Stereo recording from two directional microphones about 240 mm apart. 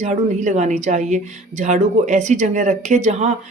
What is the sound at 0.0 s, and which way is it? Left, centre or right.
A woman's voice, right.